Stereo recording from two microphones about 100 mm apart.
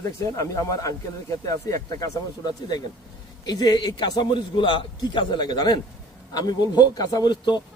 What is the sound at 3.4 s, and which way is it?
A man's voice, 40° left (ahead or behind).